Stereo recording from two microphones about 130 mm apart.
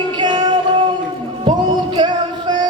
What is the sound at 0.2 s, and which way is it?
Music, 35° right (ahead or behind).